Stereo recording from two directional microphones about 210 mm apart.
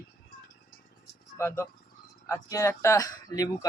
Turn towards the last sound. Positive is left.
turn(degrees=20)  # may be behind; listen again after turning